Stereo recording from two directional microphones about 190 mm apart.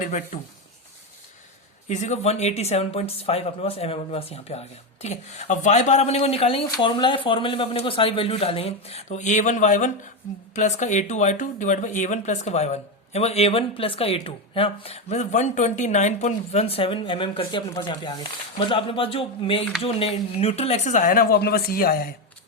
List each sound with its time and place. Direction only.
0.0 s speech: 35° left (ahead or behind)
1.9 s speech: 40° left (ahead or behind)